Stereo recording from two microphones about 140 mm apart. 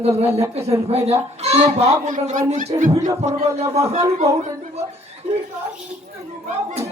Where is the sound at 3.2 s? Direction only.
50° right (ahead or behind).